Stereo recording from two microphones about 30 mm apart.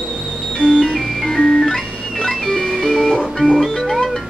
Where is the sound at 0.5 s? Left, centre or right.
Left.